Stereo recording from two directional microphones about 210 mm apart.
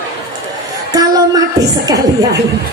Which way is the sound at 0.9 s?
20° right (ahead or behind).